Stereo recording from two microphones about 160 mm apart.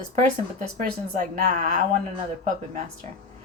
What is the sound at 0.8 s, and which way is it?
Speech, 55° right (ahead or behind).